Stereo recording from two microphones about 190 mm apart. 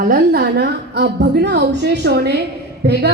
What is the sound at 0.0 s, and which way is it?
A woman's voice, 50° right (ahead or behind).